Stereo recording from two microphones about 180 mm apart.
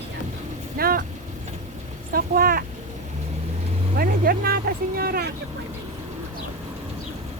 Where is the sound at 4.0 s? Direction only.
55° right (ahead or behind).